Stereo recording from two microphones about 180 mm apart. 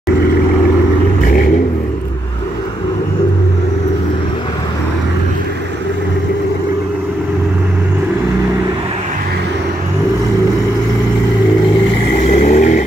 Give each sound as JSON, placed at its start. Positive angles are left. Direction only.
{"t": 12.2, "sound": "vehicle", "side_deg": 40}